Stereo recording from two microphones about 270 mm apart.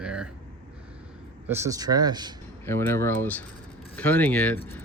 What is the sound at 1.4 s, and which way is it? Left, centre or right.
Speech, centre.